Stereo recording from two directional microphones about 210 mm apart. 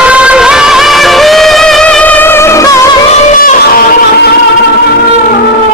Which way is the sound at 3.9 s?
45° left (ahead or behind).